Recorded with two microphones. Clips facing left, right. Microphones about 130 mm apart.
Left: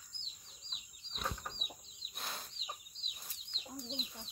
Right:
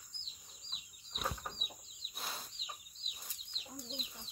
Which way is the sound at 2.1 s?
Centre (ahead or behind).